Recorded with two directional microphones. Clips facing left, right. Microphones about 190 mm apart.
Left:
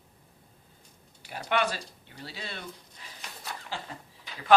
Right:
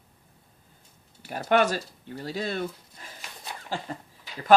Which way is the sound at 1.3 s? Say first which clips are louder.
Right 6 dB; 45° right (ahead or behind).